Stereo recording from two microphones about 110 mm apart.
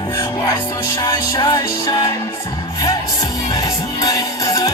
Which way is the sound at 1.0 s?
40° left (ahead or behind).